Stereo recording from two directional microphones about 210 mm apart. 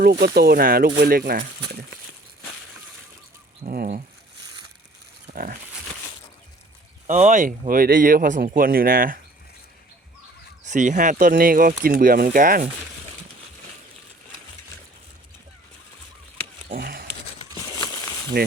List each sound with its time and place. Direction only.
0.0 s speech: 45° right (ahead or behind)
3.6 s speech: 40° right (ahead or behind)
5.3 s speech: 40° right (ahead or behind)
7.1 s speech: 35° right (ahead or behind)
10.7 s speech: 35° right (ahead or behind)
16.7 s a sound: 45° right (ahead or behind)
18.3 s speech: 50° right (ahead or behind)